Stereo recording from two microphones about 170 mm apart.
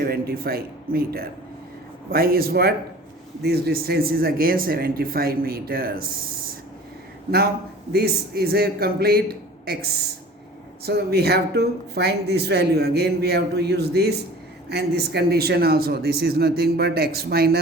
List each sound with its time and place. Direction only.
0.0 s speech: 65° right (ahead or behind)
7.9 s speech: 70° right (ahead or behind)